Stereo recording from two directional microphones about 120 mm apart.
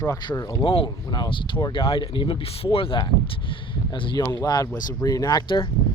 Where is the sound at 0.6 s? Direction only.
50° left (ahead or behind).